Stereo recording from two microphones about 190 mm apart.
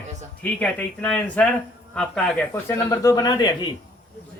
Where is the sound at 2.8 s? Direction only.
20° left (ahead or behind).